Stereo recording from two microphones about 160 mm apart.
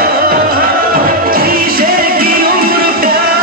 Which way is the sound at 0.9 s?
65° right (ahead or behind).